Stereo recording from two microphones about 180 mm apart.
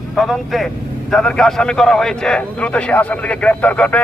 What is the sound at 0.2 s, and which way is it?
A man's voice, centre (ahead or behind).